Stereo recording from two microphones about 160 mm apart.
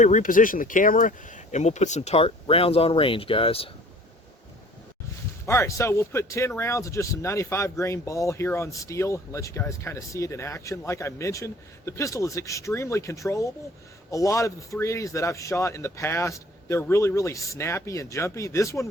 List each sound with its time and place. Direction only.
0.0 s speech: 55° left (ahead or behind); by 3.7 s 35° left (ahead or behind)
5.5 s a man's voice: 20° left (ahead or behind)